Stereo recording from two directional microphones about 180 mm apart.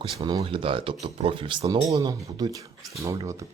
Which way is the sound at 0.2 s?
20° right (ahead or behind).